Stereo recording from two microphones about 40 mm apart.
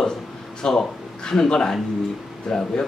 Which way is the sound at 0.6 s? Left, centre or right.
Centre.